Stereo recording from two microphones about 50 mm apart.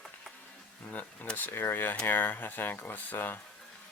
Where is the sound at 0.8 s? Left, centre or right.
Left.